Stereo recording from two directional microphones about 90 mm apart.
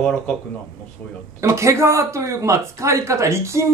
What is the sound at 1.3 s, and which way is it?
Speech, 35° right (ahead or behind).